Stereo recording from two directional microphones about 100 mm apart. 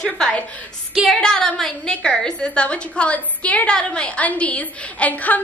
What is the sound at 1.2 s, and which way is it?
A woman's voice, 5° left (ahead or behind).